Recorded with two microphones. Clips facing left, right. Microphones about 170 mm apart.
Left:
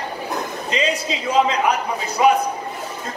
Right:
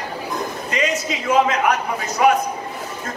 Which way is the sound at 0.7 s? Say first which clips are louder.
Left 1 dB; 25° left (ahead or behind).